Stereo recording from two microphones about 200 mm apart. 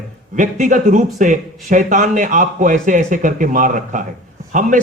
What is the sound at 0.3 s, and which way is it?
A man's voice, 40° right (ahead or behind).